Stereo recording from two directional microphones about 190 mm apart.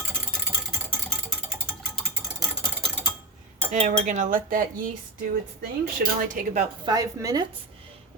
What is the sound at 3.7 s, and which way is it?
Cutlery, 40° right (ahead or behind).